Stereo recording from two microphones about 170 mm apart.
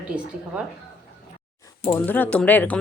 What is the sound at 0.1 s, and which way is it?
Speech, 30° right (ahead or behind).